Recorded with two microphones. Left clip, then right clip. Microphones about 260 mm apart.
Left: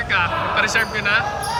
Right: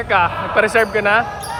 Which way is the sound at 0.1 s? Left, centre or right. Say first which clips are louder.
Right 4 dB; centre.